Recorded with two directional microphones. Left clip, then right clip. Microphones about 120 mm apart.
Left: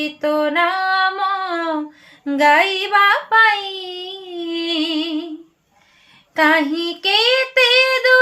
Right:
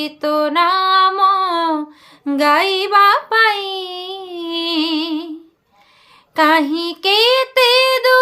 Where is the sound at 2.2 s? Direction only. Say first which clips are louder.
Left 1 dB; 40° right (ahead or behind).